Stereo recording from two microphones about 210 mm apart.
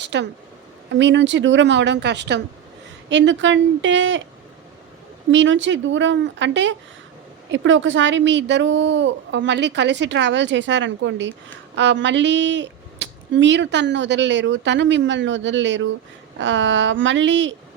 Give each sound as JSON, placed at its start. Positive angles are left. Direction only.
{"t": 0.0, "sound": "a sound", "side_deg": -55}
{"t": 0.9, "sound": "speech", "side_deg": -60}
{"t": 5.3, "sound": "speech", "side_deg": -60}